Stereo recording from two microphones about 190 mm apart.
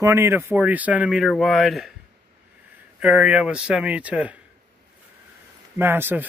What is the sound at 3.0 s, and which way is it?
Speech, 5° right (ahead or behind).